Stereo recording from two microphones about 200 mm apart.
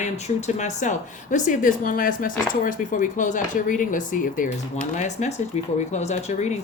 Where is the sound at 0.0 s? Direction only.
35° left (ahead or behind).